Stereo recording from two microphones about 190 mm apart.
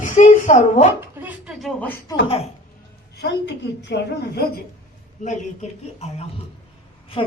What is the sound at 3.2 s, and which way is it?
A woman's voice, 65° left (ahead or behind).